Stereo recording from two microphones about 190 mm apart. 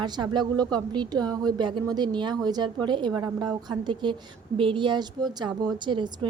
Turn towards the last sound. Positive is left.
turn(degrees=-25)  # may be behind; listen again after turning